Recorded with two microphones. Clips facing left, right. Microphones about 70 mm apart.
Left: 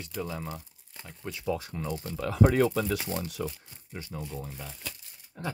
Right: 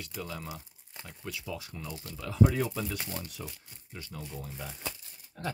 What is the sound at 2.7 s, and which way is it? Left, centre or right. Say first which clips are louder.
Speech: left 7 dB; left.